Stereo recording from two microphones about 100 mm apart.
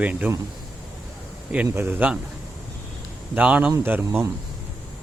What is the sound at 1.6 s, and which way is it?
Speech, 25° right (ahead or behind).